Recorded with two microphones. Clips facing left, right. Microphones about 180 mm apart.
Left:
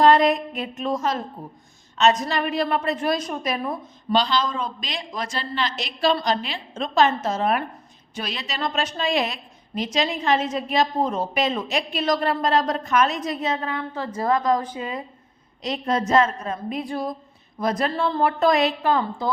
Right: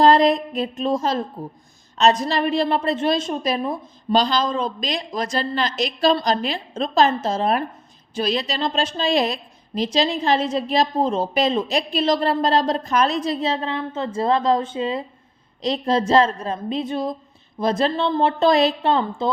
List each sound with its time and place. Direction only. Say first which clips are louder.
0.0 s a woman's voice: right 2 dB; 35° right (ahead or behind)
4.1 s a woman's voice: right 3 dB; 40° right (ahead or behind)